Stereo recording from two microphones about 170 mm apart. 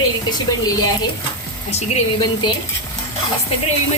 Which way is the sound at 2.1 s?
25° left (ahead or behind).